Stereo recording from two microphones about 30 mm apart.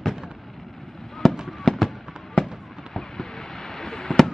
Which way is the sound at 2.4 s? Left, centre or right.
Left.